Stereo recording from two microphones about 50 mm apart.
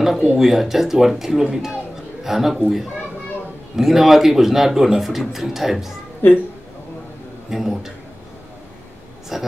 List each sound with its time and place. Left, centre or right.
0.0 s a man's voice: centre
3.7 s a man's voice: centre
7.4 s speech: centre
9.3 s a man's voice: centre